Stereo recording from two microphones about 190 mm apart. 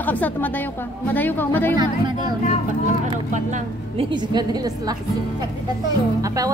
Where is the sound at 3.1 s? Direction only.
35° right (ahead or behind); by 4.9 s 20° right (ahead or behind).